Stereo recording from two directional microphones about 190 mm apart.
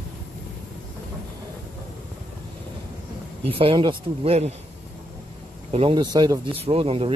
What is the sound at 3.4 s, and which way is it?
Speech, 30° right (ahead or behind).